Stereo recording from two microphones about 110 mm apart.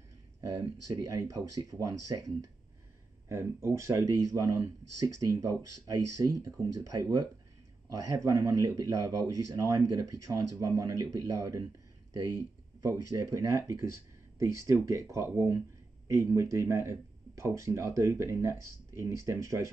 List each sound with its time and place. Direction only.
0.5 s speech: 35° right (ahead or behind)
12.8 s speech: 30° right (ahead or behind)